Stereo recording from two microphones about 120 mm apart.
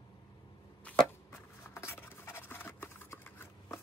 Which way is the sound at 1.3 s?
20° left (ahead or behind).